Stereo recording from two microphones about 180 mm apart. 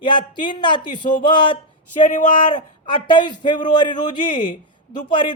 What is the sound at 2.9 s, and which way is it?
A woman's voice, 25° left (ahead or behind).